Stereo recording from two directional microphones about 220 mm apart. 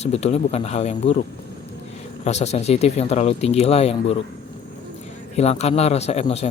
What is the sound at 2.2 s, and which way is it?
A man's voice, 30° left (ahead or behind).